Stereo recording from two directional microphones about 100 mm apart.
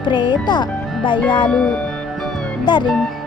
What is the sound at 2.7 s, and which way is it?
Speech, 50° left (ahead or behind).